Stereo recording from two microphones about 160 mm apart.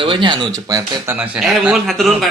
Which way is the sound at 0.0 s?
30° right (ahead or behind).